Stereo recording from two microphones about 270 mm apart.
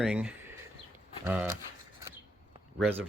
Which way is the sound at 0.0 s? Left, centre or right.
Centre.